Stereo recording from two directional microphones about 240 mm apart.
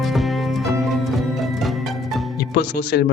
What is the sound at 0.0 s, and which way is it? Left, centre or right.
Music, centre.